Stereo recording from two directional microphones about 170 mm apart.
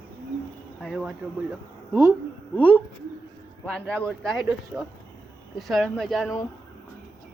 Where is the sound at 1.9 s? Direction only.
15° right (ahead or behind).